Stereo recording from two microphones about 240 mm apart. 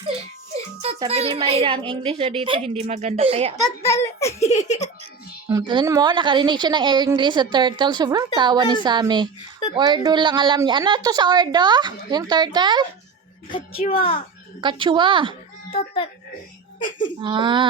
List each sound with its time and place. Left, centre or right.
0.8 s a woman's voice: right
3.8 s a child's voice: centre
4.4 s speech: left
5.5 s a woman's voice: centre
13.8 s speech: left
14.6 s a woman's voice: centre
15.7 s speech: left
17.2 s a woman's voice: centre